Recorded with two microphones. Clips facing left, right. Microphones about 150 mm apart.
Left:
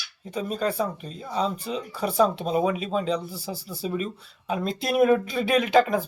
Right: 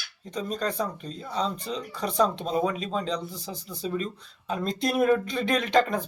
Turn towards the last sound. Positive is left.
turn(degrees=5)  # may be behind; listen again after turning